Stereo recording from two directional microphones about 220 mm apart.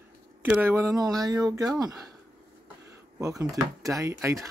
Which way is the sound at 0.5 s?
10° right (ahead or behind).